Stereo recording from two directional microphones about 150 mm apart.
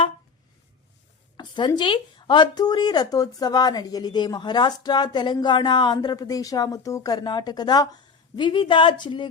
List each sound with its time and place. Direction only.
1.4 s a woman's voice: 30° left (ahead or behind)